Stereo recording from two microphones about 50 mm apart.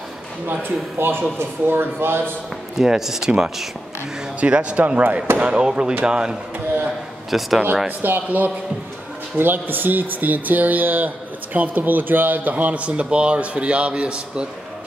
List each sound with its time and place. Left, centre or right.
0.5 s speech: right
2.8 s speech: centre
4.4 s speech: right
7.2 s speech: centre
8.0 s speech: right; by 14.5 s centre